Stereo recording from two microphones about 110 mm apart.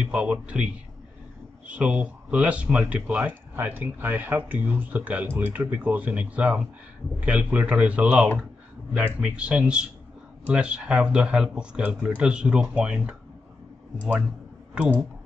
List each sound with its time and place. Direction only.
0.1 s speech: 10° right (ahead or behind)
1.7 s speech: 10° right (ahead or behind)
14.7 s speech: 10° right (ahead or behind)